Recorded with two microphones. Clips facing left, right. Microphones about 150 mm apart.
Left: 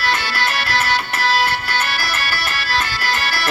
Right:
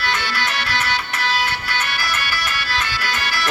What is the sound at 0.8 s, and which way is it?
Music, 45° left (ahead or behind).